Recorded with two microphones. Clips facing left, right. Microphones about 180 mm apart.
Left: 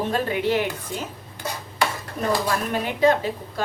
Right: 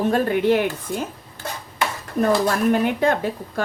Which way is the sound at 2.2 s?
50° right (ahead or behind).